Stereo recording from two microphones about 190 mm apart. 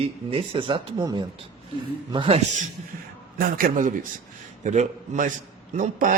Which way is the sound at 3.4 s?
45° right (ahead or behind).